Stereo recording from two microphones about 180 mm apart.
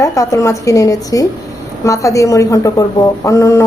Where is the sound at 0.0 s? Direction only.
15° left (ahead or behind).